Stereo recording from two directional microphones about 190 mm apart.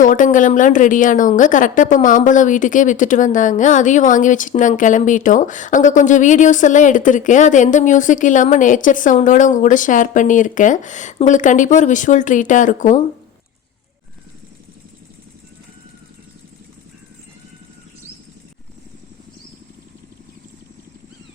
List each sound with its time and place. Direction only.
0.0 s a woman's voice: 45° left (ahead or behind)